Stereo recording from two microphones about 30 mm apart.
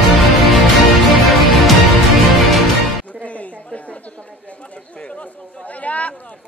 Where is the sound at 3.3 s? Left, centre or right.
Left.